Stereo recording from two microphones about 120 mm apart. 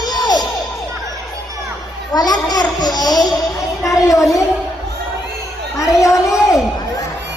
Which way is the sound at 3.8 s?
25° left (ahead or behind).